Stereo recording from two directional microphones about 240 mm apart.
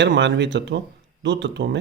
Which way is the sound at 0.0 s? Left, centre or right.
Right.